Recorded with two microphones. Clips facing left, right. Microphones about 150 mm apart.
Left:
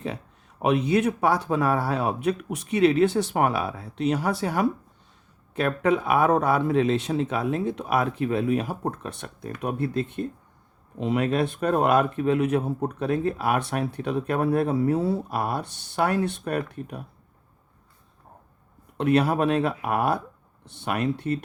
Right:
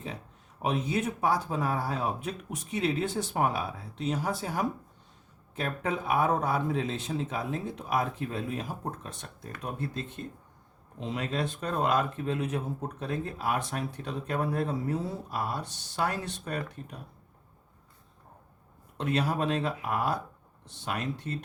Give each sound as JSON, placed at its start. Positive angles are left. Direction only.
{"t": 0.6, "sound": "speech", "side_deg": 70}
{"t": 18.9, "sound": "speech", "side_deg": 60}